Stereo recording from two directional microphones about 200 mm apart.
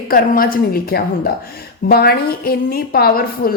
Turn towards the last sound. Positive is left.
turn(degrees=50)  # may be behind; listen again after turning